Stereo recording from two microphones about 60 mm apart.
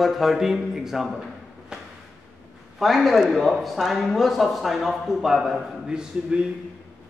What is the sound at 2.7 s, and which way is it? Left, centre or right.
Speech, centre.